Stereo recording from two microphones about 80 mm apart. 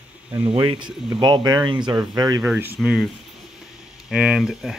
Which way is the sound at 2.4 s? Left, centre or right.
Right.